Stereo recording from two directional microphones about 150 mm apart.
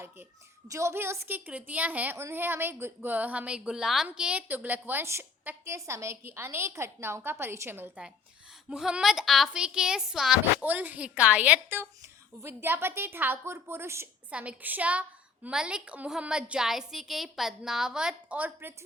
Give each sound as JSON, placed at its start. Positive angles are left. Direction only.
{"t": 0.7, "sound": "a woman's voice", "side_deg": -20}